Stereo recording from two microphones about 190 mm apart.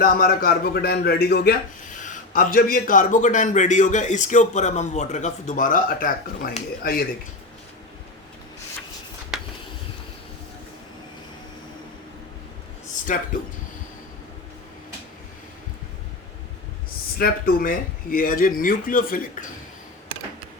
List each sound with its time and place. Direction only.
0.0 s a man's voice: 50° left (ahead or behind)
9.3 s a sound: centre (ahead or behind)
13.1 s a man's voice: 40° left (ahead or behind)
17.2 s speech: 50° left (ahead or behind)